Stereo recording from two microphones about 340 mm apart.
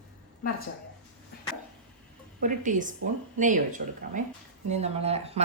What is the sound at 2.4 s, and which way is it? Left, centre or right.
A woman's voice, right.